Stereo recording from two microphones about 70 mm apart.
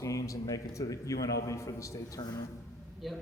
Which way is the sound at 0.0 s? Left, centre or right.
Left.